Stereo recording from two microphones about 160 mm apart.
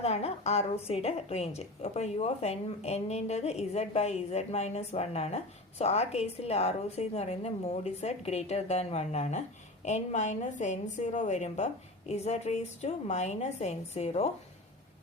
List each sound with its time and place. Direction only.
0.0 s a woman's voice: 40° left (ahead or behind)